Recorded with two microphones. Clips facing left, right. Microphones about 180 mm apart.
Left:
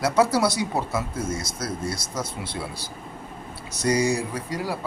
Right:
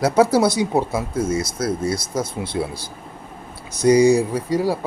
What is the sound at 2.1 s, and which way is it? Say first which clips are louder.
Speech: right 7 dB; 25° right (ahead or behind).